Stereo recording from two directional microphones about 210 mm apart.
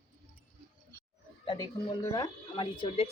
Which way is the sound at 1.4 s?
20° left (ahead or behind).